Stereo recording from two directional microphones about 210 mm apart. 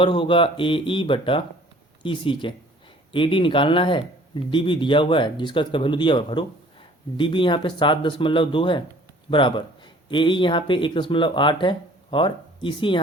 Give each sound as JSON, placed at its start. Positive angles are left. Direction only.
{"t": 0.0, "sound": "speech", "side_deg": 25}